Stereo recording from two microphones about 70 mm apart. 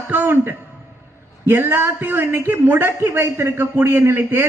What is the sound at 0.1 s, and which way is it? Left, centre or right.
A man's voice, right.